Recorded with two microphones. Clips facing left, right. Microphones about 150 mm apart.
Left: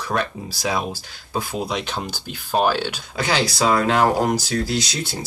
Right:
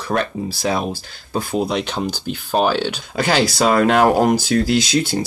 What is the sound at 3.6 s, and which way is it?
Speech, 65° right (ahead or behind).